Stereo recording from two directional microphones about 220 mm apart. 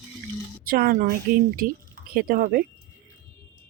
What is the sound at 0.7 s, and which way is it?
Speech, 40° right (ahead or behind).